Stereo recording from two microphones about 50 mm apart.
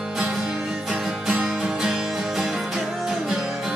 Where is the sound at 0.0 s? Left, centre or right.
Centre.